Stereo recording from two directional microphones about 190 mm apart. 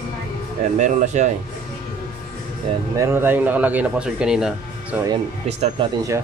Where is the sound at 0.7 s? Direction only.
40° right (ahead or behind).